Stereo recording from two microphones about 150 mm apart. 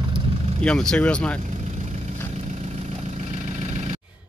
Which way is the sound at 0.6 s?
5° left (ahead or behind).